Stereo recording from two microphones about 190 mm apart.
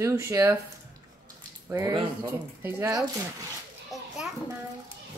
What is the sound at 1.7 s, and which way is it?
Speech, 15° right (ahead or behind).